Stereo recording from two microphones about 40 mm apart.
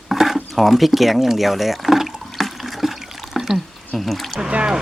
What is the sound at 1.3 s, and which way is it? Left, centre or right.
Speech, centre.